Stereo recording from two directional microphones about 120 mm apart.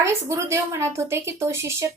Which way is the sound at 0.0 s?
25° right (ahead or behind).